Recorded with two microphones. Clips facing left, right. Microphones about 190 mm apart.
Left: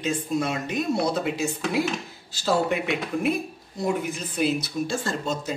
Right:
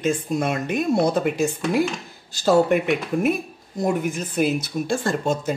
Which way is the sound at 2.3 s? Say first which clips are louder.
Right 6 dB; 50° right (ahead or behind).